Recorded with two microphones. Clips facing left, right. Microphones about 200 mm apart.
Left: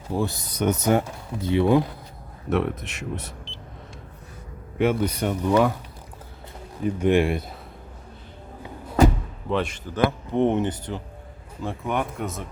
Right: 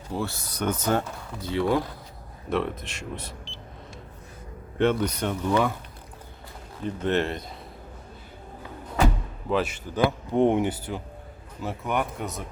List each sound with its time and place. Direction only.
0.1 s speech: 15° left (ahead or behind)
2.5 s speech: centre (ahead or behind)
4.8 s speech: 10° left (ahead or behind)
6.8 s speech: 10° left (ahead or behind)
9.5 s speech: 5° right (ahead or behind)